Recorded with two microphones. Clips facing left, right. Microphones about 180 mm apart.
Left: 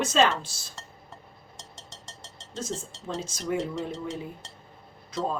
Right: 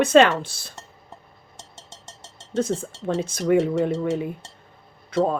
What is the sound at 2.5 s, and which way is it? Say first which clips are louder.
Speech: right 11 dB; 60° right (ahead or behind).